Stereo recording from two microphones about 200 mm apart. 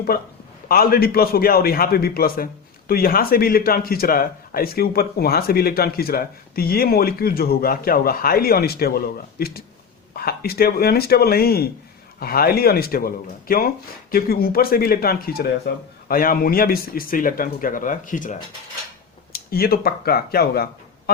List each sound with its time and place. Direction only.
0.7 s a man's voice: 50° left (ahead or behind)